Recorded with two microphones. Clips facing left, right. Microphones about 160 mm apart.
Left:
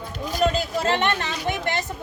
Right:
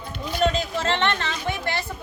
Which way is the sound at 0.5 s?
15° left (ahead or behind).